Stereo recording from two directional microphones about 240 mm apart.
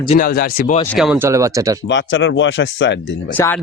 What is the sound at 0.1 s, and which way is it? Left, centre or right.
Speech, left.